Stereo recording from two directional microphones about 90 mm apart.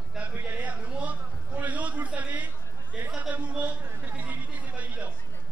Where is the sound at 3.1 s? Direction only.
15° right (ahead or behind).